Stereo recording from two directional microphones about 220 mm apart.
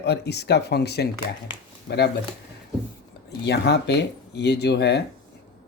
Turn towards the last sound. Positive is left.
turn(degrees=50)  # may be behind; listen again after turning